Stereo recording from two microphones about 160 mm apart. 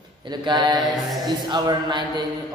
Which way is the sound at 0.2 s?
30° right (ahead or behind).